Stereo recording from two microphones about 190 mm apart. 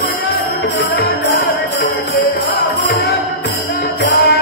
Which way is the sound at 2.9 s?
60° left (ahead or behind).